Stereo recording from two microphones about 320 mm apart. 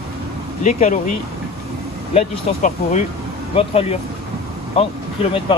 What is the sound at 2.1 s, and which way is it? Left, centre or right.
Speech, left.